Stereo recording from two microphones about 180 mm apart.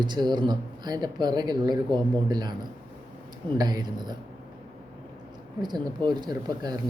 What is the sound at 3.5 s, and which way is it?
Speech, 20° right (ahead or behind).